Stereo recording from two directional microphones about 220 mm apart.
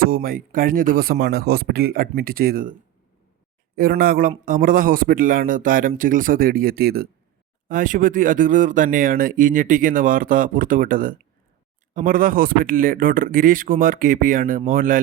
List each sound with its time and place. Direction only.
0.1 s speech: 40° right (ahead or behind)
3.8 s speech: 40° right (ahead or behind)